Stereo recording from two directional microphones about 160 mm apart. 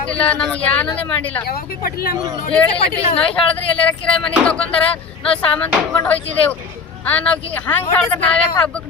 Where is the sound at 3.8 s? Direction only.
5° left (ahead or behind).